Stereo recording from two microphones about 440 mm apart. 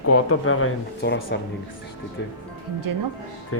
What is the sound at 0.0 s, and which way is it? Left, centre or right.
Speech, left.